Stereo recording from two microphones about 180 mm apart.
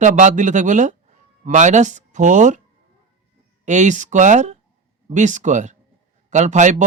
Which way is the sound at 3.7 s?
40° right (ahead or behind).